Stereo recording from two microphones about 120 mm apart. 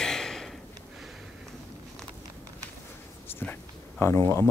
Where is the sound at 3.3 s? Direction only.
15° left (ahead or behind).